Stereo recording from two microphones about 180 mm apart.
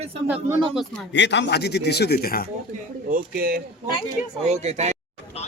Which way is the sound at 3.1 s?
60° right (ahead or behind).